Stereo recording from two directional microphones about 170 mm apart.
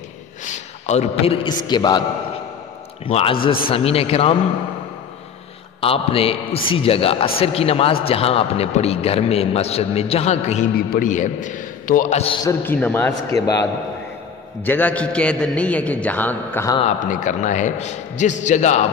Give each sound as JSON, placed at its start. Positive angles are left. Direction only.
{"t": 0.5, "sound": "a man's voice", "side_deg": 40}
{"t": 3.1, "sound": "a man's voice", "side_deg": 35}
{"t": 5.8, "sound": "a man's voice", "side_deg": 35}
{"t": 12.4, "sound": "a man's voice", "side_deg": 10}
{"t": 17.1, "sound": "a man's voice", "side_deg": 45}